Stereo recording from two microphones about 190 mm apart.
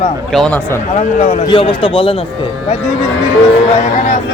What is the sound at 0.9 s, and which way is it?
Speech, 40° left (ahead or behind).